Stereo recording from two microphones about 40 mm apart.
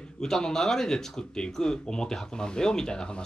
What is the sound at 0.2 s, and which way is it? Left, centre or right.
Speech, centre.